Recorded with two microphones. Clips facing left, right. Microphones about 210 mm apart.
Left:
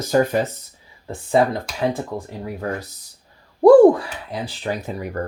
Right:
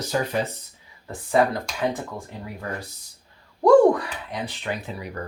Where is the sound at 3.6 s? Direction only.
30° left (ahead or behind).